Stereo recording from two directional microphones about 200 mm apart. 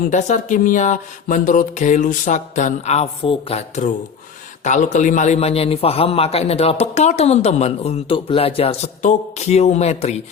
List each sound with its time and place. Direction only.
0.1 s a man's voice: 35° left (ahead or behind)